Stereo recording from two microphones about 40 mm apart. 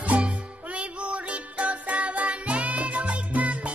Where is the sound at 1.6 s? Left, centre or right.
Right.